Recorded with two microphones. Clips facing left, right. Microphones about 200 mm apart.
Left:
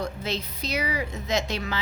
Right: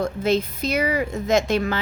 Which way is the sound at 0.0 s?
50° right (ahead or behind).